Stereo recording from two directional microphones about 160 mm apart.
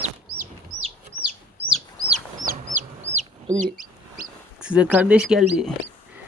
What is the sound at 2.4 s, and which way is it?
Chicken, 55° right (ahead or behind).